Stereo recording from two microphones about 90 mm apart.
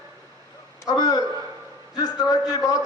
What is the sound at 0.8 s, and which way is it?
A man's voice, 45° left (ahead or behind).